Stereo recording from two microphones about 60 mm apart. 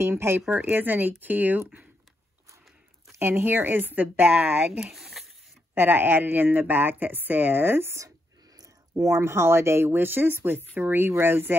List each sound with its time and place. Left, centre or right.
0.0 s speech: right
3.2 s speech: right
4.7 s speech: centre
5.8 s speech: right
8.5 s speech: right